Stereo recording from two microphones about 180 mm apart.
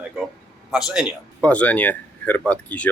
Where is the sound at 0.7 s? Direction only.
5° right (ahead or behind).